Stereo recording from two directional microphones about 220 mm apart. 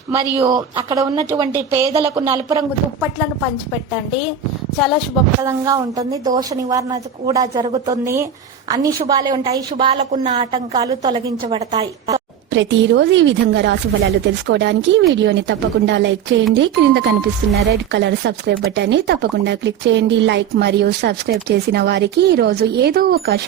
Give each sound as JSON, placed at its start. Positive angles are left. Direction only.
{"t": 0.3, "sound": "a woman's voice", "side_deg": -15}
{"t": 4.8, "sound": "speech", "side_deg": 0}
{"t": 5.4, "sound": "a woman's voice", "side_deg": -15}
{"t": 12.5, "sound": "a woman's voice", "side_deg": -55}